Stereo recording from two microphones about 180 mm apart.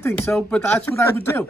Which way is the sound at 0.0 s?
15° left (ahead or behind).